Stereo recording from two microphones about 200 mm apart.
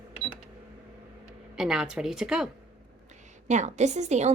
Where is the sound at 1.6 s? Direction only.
5° right (ahead or behind).